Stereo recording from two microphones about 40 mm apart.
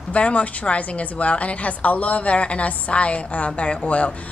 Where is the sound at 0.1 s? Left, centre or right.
Left.